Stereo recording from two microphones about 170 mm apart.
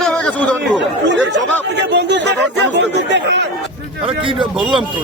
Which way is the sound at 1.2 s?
90° right.